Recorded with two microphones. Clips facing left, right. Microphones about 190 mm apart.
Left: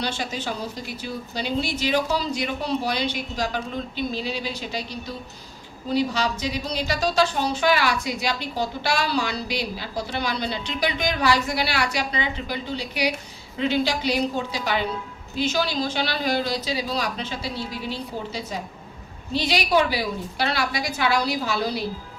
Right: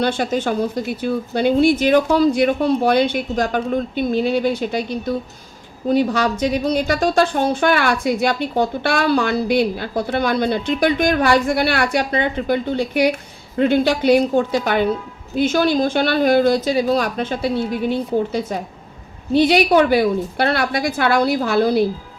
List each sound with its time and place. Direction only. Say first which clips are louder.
0.0 s a woman's voice: right 10 dB; 55° right (ahead or behind)